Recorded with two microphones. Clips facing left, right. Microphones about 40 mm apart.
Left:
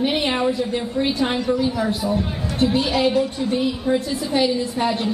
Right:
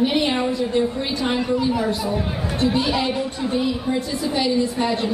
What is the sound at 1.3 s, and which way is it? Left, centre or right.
Speech, centre.